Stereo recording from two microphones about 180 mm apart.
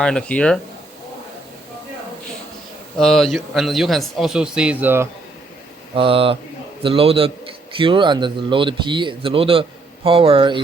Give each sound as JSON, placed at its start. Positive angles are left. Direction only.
{"t": 0.0, "sound": "a man's voice", "side_deg": 5}
{"t": 3.0, "sound": "a man's voice", "side_deg": 0}
{"t": 5.9, "sound": "a man's voice", "side_deg": -30}